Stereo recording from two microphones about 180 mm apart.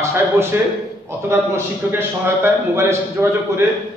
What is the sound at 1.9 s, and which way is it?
A man's voice, 10° right (ahead or behind).